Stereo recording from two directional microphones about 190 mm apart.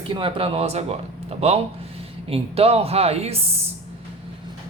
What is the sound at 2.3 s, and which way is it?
Speech, 30° right (ahead or behind).